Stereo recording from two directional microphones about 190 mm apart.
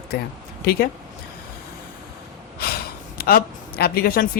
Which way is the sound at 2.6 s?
50° left (ahead or behind).